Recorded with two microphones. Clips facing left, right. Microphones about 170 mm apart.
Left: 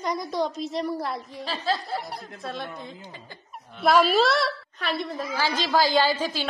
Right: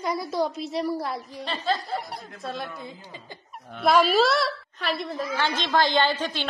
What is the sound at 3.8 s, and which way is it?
A woman's voice, centre (ahead or behind).